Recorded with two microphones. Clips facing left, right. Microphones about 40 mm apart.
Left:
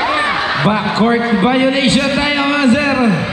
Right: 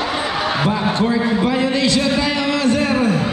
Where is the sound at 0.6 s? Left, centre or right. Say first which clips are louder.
Left 6 dB; left.